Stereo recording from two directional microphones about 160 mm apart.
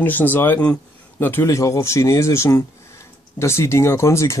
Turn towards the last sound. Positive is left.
turn(degrees=15)  # may be behind; listen again after turning